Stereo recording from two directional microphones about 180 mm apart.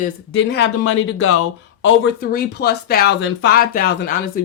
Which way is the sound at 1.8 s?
90° left.